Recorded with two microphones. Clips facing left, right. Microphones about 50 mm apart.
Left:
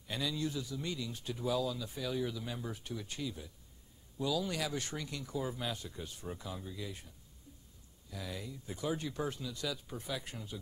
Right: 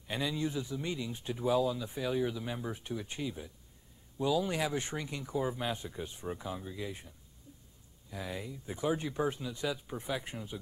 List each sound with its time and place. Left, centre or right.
0.1 s speech: right
8.1 s speech: right